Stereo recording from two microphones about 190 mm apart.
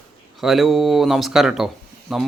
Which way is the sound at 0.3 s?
Centre (ahead or behind).